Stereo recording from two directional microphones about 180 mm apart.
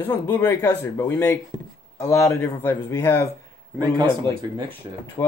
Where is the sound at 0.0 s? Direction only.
10° left (ahead or behind).